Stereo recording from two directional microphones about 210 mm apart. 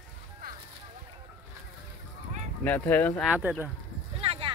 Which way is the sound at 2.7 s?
10° left (ahead or behind).